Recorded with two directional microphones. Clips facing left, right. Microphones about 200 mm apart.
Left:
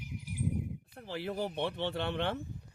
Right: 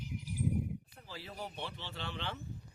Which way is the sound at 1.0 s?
65° left (ahead or behind).